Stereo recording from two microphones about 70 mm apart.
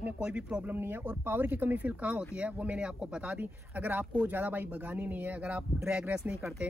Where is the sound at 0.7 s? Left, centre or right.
Right.